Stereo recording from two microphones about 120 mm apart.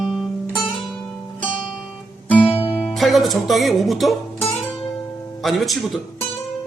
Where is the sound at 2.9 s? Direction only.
Centre (ahead or behind).